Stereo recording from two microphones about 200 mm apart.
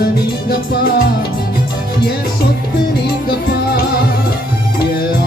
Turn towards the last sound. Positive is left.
turn(degrees=55)  # may be behind; listen again after turning